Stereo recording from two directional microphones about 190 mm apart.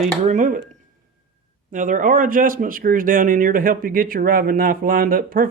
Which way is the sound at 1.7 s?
45° right (ahead or behind).